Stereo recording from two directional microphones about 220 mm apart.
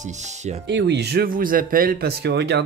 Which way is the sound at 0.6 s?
50° right (ahead or behind).